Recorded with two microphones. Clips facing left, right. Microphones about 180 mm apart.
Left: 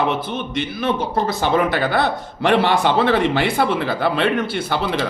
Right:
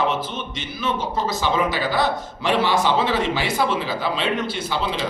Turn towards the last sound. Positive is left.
turn(degrees=60)  # may be behind; listen again after turning